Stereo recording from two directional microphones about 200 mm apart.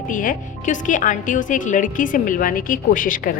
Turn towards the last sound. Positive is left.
turn(degrees=45)  # may be behind; listen again after turning